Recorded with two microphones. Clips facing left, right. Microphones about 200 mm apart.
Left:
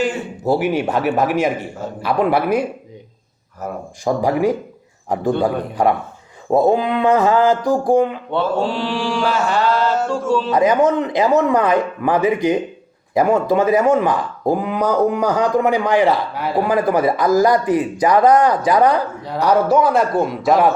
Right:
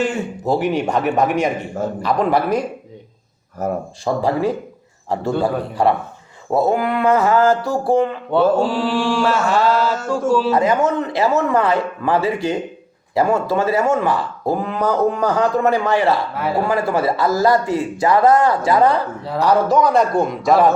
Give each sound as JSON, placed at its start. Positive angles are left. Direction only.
{"t": 0.0, "sound": "mantra", "side_deg": 5}
{"t": 2.0, "sound": "speech", "side_deg": 10}
{"t": 3.6, "sound": "speech", "side_deg": -45}
{"t": 4.0, "sound": "a man's voice", "side_deg": 15}
{"t": 8.3, "sound": "mantra", "side_deg": -5}
{"t": 10.1, "sound": "speech", "side_deg": -10}
{"t": 10.5, "sound": "speech", "side_deg": 15}
{"t": 16.3, "sound": "mantra", "side_deg": 0}
{"t": 16.6, "sound": "speech", "side_deg": 15}
{"t": 19.4, "sound": "mantra", "side_deg": 10}